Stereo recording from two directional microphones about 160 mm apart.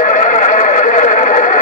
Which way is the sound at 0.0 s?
50° left (ahead or behind).